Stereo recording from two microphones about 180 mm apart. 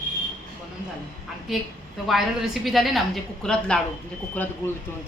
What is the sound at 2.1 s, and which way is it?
A woman's voice, centre (ahead or behind).